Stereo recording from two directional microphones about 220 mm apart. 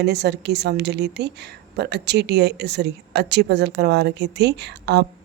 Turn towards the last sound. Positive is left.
turn(degrees=-50)  # may be behind; listen again after turning